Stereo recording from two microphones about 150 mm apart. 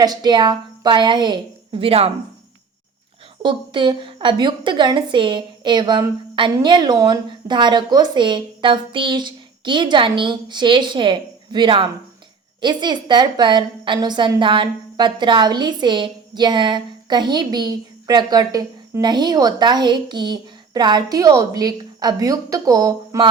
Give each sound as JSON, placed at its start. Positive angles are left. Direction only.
{"t": 0.0, "sound": "a woman's voice", "side_deg": -25}
{"t": 3.4, "sound": "a woman's voice", "side_deg": -35}